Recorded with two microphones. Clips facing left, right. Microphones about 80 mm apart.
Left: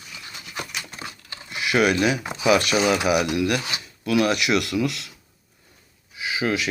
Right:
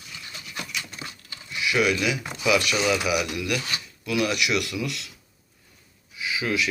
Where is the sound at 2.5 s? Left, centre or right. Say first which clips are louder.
Left 3 dB; left.